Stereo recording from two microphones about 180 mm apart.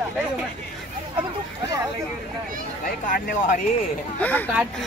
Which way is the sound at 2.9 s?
55° left (ahead or behind).